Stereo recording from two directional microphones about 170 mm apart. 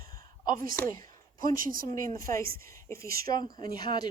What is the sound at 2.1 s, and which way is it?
Speech, 55° right (ahead or behind).